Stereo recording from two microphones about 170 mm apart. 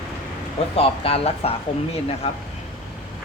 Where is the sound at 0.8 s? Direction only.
35° left (ahead or behind).